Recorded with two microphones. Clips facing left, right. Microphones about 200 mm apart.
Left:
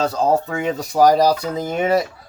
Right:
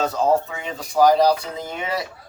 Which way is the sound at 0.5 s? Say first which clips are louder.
Left 4 dB; 45° left (ahead or behind).